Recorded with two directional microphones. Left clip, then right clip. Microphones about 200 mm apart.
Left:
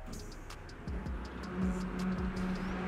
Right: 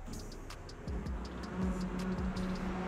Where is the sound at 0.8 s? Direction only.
Centre (ahead or behind).